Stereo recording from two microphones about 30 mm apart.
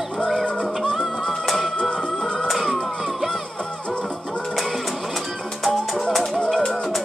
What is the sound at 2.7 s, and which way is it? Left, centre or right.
Music, centre.